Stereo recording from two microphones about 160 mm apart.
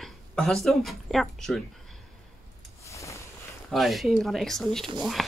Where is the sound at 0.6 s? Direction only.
Centre (ahead or behind).